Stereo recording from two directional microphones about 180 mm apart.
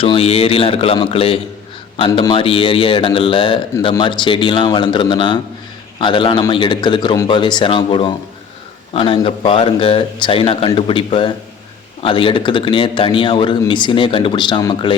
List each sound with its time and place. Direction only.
0.0 s a man's voice: 30° left (ahead or behind)